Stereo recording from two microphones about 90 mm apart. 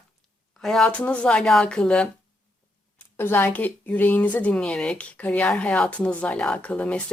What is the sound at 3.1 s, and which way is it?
Speech, 25° left (ahead or behind).